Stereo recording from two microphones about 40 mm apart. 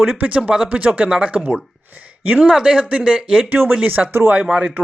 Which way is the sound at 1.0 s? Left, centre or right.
Centre.